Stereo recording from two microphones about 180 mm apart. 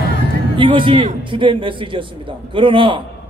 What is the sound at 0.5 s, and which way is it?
A man's voice, 30° right (ahead or behind).